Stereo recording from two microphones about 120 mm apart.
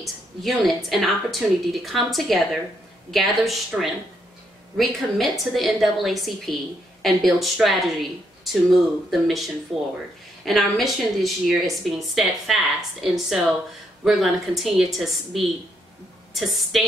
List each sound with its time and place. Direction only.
0.0 s speech: centre (ahead or behind)